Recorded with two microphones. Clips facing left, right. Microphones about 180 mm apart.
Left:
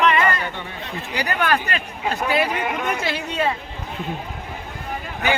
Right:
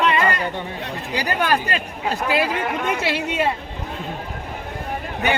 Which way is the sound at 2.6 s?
5° left (ahead or behind).